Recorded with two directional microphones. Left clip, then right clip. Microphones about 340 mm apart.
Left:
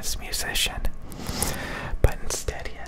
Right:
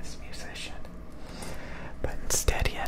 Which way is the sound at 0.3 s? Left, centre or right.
Left.